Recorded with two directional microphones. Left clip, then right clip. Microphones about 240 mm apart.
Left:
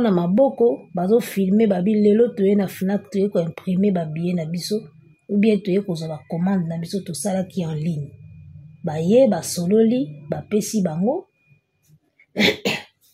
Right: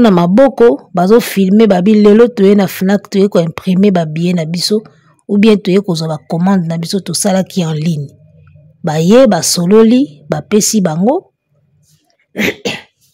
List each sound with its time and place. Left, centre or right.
0.0 s a woman's voice: right
12.3 s a woman's voice: right